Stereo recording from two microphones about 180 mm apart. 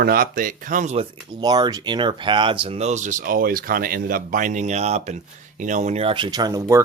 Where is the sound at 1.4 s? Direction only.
20° right (ahead or behind).